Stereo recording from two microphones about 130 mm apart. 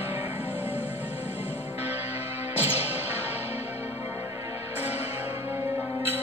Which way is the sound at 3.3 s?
15° right (ahead or behind).